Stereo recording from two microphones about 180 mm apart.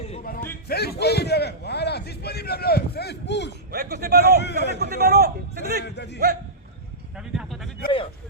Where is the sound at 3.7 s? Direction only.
60° right (ahead or behind).